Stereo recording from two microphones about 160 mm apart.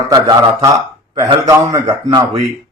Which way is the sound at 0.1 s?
25° right (ahead or behind).